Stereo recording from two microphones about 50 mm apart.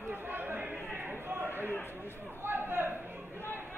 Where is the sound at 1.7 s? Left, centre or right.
Left.